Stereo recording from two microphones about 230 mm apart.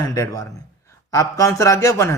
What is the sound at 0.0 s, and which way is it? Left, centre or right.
A man's voice, centre.